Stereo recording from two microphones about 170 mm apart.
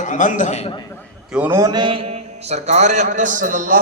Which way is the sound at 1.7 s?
30° right (ahead or behind).